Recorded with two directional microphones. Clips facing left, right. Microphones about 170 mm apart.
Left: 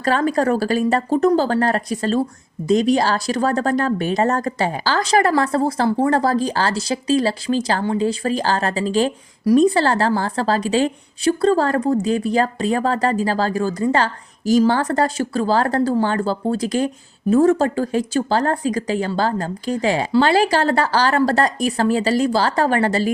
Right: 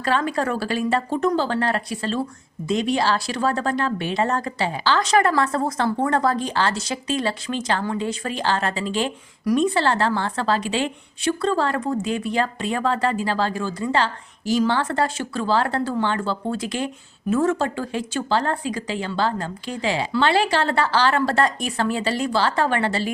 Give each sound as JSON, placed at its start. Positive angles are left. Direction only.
{"t": 0.0, "sound": "speech", "side_deg": 40}